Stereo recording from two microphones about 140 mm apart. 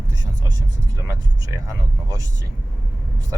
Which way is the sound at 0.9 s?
25° right (ahead or behind).